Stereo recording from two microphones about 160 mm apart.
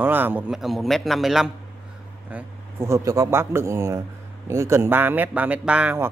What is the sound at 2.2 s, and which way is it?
A man's voice, 15° right (ahead or behind).